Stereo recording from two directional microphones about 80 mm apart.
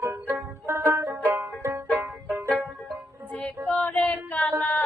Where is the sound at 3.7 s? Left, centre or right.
Centre.